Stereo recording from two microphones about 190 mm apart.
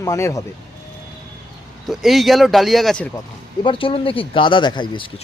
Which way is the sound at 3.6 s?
25° left (ahead or behind).